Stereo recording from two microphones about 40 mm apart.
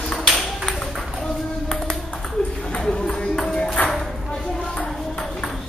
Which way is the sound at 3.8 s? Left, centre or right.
Left.